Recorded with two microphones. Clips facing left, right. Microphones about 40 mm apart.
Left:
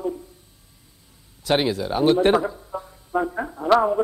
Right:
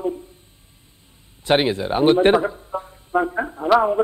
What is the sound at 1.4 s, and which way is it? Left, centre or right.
A man's voice, right.